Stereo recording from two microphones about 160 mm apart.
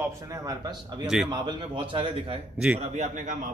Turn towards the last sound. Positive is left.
turn(degrees=-50)  # may be behind; listen again after turning